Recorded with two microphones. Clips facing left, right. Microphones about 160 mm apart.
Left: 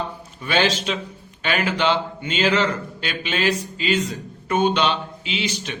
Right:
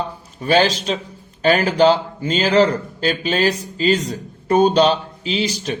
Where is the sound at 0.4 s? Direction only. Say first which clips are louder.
Right 5 dB; 40° right (ahead or behind).